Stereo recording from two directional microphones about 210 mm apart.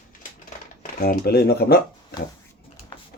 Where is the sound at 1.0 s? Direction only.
45° left (ahead or behind).